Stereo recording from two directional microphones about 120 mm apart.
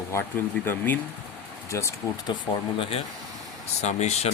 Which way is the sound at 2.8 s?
55° left (ahead or behind).